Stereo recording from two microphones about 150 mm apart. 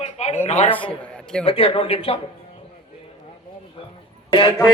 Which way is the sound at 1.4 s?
40° left (ahead or behind).